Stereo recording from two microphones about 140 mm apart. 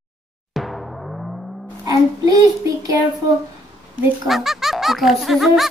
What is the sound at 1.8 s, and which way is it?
Child singing, 25° right (ahead or behind).